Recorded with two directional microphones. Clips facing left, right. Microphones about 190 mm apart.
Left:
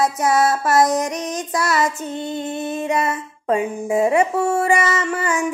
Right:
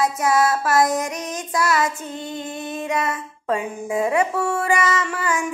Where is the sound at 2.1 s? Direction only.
25° left (ahead or behind).